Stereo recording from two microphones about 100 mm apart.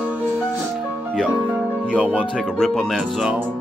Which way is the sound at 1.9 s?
10° right (ahead or behind).